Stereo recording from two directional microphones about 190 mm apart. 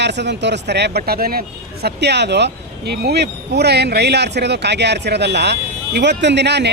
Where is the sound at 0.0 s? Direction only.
65° right (ahead or behind).